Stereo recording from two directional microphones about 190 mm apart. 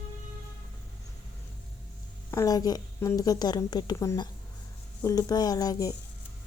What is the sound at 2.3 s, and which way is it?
A woman's voice, 15° left (ahead or behind).